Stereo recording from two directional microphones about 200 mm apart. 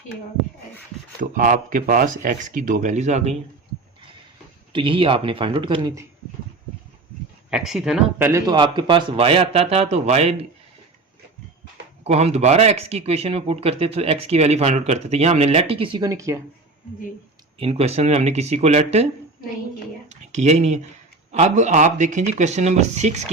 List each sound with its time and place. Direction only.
1.2 s speech: 40° right (ahead or behind)
4.7 s a man's voice: 25° right (ahead or behind)
7.5 s speech: centre (ahead or behind)
8.3 s a man's voice: 15° right (ahead or behind)
12.0 s speech: 30° right (ahead or behind); by 16.4 s 15° right (ahead or behind)
17.6 s speech: 30° right (ahead or behind)
20.1 s a sound: 35° right (ahead or behind)
21.3 s speech: 35° right (ahead or behind)